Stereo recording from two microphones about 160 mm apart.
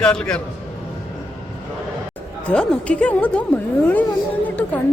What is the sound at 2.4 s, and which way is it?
A woman's voice, 5° left (ahead or behind).